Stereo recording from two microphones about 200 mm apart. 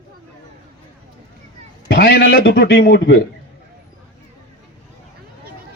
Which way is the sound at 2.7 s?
60° left (ahead or behind).